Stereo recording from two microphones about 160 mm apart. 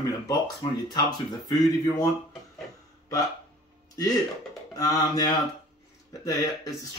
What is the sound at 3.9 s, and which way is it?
Speech, 20° left (ahead or behind).